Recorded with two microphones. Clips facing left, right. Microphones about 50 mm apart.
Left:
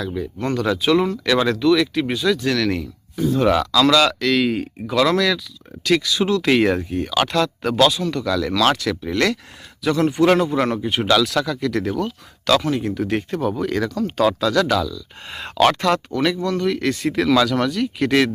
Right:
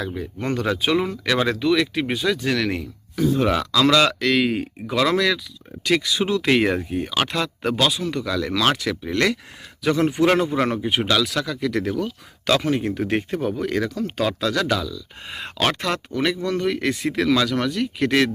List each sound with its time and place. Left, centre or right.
0.1 s speech: right
6.5 s speech: centre
9.8 s speech: right
10.5 s speech: centre
12.5 s speech: right
13.6 s speech: centre
16.4 s speech: right
17.1 s speech: centre